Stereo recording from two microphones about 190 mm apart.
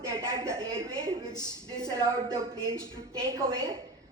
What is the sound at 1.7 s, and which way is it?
Speech, 15° right (ahead or behind).